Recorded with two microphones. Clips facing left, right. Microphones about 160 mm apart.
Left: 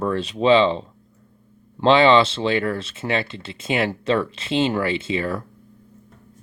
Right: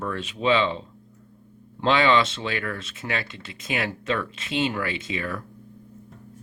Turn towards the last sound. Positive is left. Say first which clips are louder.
# left 7 dB
turn(degrees=30)  # may be behind; listen again after turning